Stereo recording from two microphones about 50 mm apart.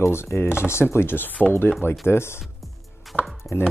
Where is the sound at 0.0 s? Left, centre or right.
Left.